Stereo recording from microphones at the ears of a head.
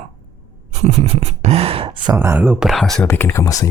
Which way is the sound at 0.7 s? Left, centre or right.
Right.